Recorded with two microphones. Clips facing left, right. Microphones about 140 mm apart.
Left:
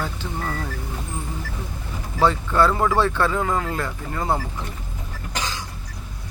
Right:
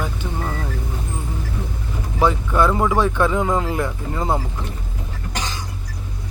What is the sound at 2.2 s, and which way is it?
Speech, 15° right (ahead or behind).